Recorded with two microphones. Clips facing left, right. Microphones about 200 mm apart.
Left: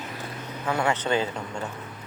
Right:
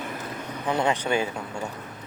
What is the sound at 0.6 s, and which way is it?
Speech, 20° right (ahead or behind).